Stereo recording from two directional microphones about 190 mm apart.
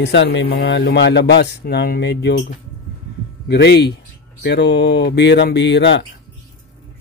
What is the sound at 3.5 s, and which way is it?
Speech, 60° left (ahead or behind).